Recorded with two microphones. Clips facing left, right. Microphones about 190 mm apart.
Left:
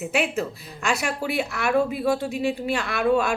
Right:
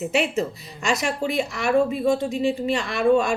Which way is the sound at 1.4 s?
60° left (ahead or behind).